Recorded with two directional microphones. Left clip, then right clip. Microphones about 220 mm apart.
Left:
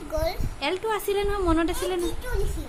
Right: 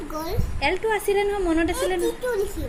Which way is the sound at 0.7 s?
15° left (ahead or behind).